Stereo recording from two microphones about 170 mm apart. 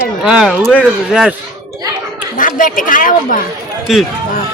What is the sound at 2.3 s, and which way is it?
Speech, 50° left (ahead or behind).